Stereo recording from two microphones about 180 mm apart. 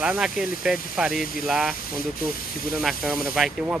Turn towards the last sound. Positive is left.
turn(degrees=-5)  # may be behind; listen again after turning